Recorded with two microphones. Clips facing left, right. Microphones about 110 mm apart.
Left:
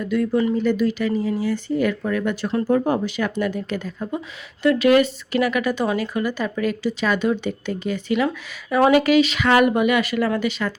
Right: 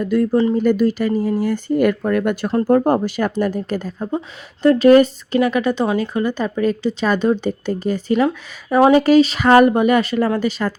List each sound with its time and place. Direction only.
0.0 s a woman's voice: 40° right (ahead or behind)
0.6 s a woman's voice: 45° right (ahead or behind)